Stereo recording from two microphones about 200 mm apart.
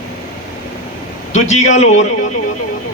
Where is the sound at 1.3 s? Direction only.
35° left (ahead or behind).